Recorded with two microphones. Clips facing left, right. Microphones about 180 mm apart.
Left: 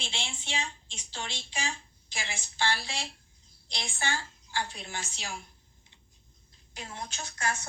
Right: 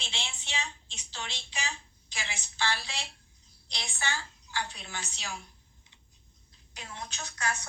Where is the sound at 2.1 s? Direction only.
30° left (ahead or behind).